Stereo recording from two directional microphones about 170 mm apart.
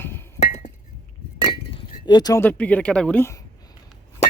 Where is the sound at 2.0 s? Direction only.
25° left (ahead or behind).